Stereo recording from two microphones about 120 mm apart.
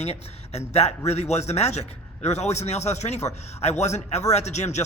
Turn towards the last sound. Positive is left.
turn(degrees=70)  # may be behind; listen again after turning